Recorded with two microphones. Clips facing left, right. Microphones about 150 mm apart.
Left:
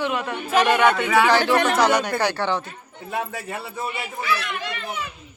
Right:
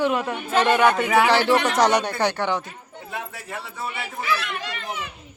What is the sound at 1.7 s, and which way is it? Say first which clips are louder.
Speech: even; 40° right (ahead or behind).